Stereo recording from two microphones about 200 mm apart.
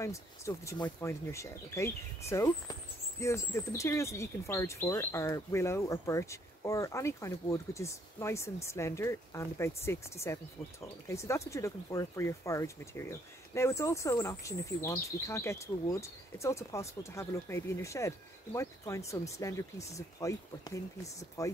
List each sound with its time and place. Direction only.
0.0 s speech: 15° left (ahead or behind)